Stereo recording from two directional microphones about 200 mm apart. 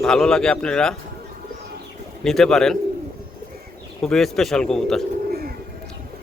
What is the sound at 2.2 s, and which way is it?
Speech, centre (ahead or behind).